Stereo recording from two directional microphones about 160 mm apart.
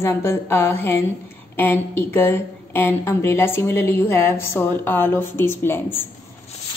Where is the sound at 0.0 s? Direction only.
15° left (ahead or behind).